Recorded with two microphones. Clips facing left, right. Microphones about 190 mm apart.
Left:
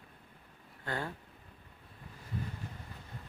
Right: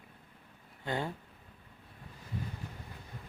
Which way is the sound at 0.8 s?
20° right (ahead or behind).